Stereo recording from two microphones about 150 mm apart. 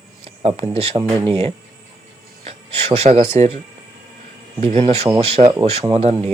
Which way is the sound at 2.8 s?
45° right (ahead or behind).